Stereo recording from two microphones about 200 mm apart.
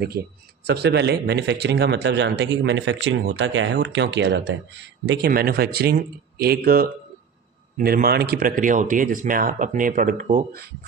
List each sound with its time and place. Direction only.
0.7 s a man's voice: 55° right (ahead or behind)